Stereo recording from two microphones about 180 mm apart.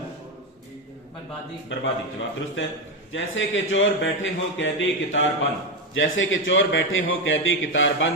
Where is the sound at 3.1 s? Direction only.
90° left.